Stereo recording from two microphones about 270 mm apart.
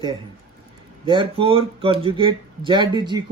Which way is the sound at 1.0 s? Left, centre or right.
Centre.